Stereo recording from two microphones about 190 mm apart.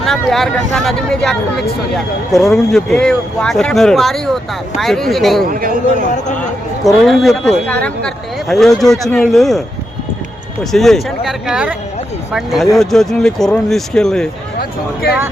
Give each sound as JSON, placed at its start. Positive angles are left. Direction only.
{"t": 0.0, "sound": "speech", "side_deg": 0}
{"t": 5.5, "sound": "speech", "side_deg": -50}
{"t": 6.8, "sound": "speech", "side_deg": 0}